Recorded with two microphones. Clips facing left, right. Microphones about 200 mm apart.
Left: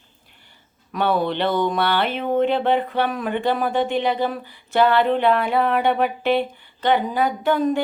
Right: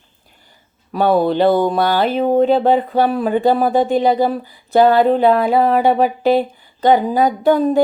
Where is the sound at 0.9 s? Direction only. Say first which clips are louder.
Right 7 dB; 40° right (ahead or behind).